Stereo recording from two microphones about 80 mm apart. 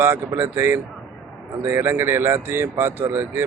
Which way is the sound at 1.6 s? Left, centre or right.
Right.